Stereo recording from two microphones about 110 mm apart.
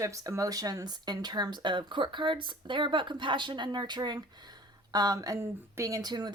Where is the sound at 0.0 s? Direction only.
30° right (ahead or behind).